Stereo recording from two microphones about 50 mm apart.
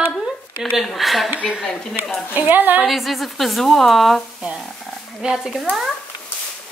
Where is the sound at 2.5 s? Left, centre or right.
Right.